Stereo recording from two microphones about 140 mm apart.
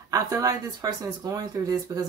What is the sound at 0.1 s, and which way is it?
Speech, 25° right (ahead or behind).